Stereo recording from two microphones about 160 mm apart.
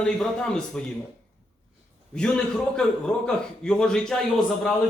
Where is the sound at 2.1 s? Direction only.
5° left (ahead or behind).